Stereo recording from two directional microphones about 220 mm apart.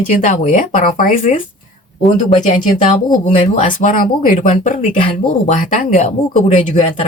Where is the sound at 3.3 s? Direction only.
35° left (ahead or behind).